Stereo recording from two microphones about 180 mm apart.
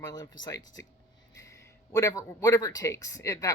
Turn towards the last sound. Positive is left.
turn(degrees=20)  # may be behind; listen again after turning